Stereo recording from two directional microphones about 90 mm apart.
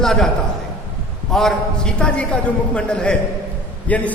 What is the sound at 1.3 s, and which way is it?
A man's voice, 5° left (ahead or behind).